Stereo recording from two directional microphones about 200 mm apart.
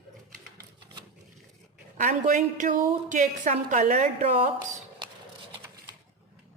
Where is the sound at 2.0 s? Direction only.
40° right (ahead or behind).